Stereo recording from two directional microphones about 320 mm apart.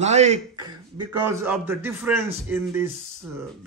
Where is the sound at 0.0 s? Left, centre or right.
Centre.